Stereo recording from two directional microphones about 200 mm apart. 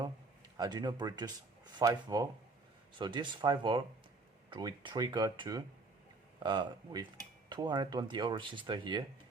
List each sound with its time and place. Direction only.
0.5 s cutlery: 20° right (ahead or behind)